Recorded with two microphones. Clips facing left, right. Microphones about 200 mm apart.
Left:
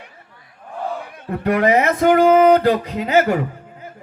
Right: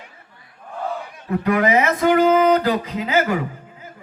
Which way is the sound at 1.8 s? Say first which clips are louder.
Left 2 dB; 50° left (ahead or behind).